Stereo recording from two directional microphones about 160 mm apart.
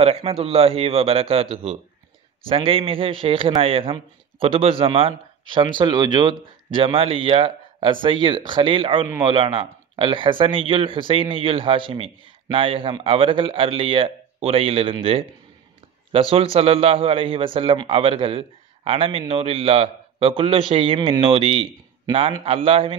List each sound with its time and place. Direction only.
0.0 s a man's voice: 40° right (ahead or behind)